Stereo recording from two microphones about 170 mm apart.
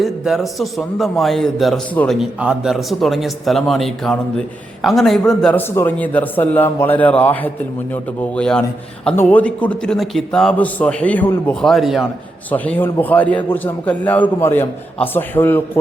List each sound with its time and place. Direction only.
0.0 s a man's voice: centre (ahead or behind)